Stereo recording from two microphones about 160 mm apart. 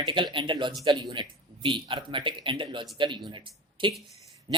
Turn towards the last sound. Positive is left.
turn(degrees=-30)  # may be behind; listen again after turning